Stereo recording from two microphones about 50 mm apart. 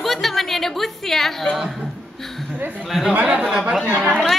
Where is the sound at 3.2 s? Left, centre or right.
Centre.